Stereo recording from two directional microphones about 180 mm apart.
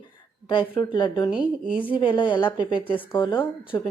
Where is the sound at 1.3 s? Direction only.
5° right (ahead or behind).